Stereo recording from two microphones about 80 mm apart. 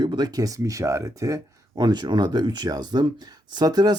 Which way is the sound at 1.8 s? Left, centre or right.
Right.